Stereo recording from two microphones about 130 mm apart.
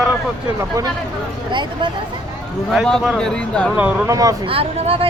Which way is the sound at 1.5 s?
35° right (ahead or behind).